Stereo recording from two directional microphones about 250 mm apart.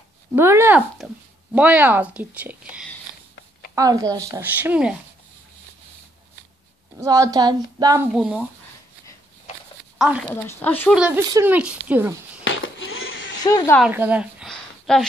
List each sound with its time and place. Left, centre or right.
0.4 s speech: centre
7.0 s speech: centre
9.9 s speech: centre
10.3 s speech: centre
11.0 s speech: centre
12.4 s a sound: left
13.4 s speech: centre
13.7 s a sound: centre